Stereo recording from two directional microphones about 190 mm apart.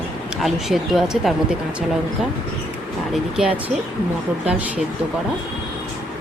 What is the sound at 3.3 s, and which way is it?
Speech, 5° right (ahead or behind).